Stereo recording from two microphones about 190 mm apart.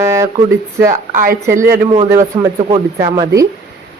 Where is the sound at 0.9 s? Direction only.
45° right (ahead or behind).